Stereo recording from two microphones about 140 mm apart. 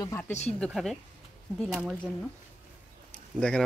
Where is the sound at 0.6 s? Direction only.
Centre (ahead or behind).